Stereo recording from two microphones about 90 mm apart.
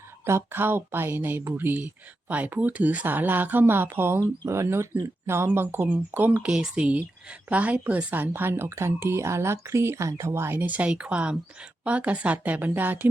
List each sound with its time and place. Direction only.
0.3 s speech: 25° right (ahead or behind)
10.6 s a woman's voice: 15° right (ahead or behind)